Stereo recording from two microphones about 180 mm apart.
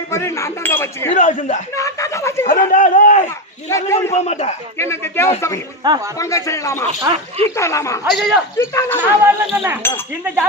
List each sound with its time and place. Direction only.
0.1 s speech: 15° left (ahead or behind)
1.1 s speech: 45° left (ahead or behind)
1.7 s speech: 15° left (ahead or behind)
2.5 s speech: 45° left (ahead or behind)
3.2 s speech: 15° left (ahead or behind)
4.1 s a man's voice: 35° left (ahead or behind)
4.8 s speech: 15° left (ahead or behind)
5.8 s speech: 25° right (ahead or behind)
6.1 s speech: 15° left (ahead or behind)
7.1 s speech: 20° right (ahead or behind)
7.5 s speech: 15° left (ahead or behind)
8.1 s a man's voice: centre (ahead or behind)
8.5 s speech: 15° left (ahead or behind)
9.0 s speech: 10° right (ahead or behind)